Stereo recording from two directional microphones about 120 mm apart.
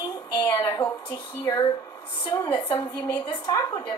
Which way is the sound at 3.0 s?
35° left (ahead or behind).